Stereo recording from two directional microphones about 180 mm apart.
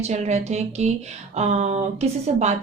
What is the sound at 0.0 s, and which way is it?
Speech, 40° right (ahead or behind).